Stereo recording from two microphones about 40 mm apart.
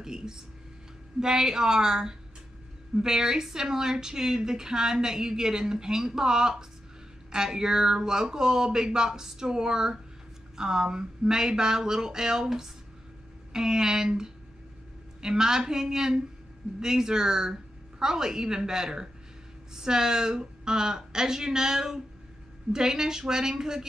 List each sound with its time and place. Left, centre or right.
0.0 s a woman's voice: centre